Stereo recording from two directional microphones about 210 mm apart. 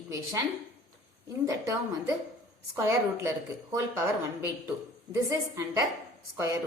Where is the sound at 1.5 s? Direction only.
15° right (ahead or behind).